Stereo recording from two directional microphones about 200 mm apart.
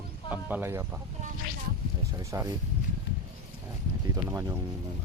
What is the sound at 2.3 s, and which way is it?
Speech, 15° right (ahead or behind).